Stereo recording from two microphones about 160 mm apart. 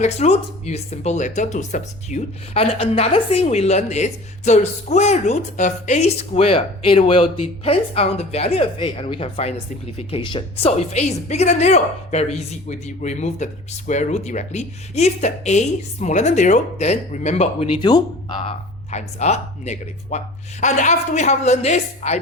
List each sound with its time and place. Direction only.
0.0 s speech: 45° left (ahead or behind)
17.8 s speech: 30° left (ahead or behind)
18.9 s speech: 45° left (ahead or behind)